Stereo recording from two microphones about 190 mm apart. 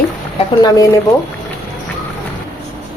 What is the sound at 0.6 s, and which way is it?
Speech, 15° left (ahead or behind).